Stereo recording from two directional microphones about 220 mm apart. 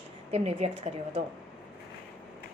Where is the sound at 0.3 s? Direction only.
30° right (ahead or behind).